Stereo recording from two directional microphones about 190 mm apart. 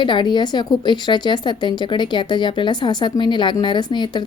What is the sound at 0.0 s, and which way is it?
A woman's voice, 25° left (ahead or behind).